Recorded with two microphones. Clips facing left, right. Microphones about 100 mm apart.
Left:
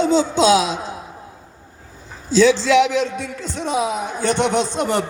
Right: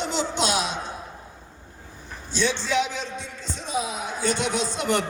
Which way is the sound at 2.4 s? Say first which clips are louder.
Left 10 dB; 90° left.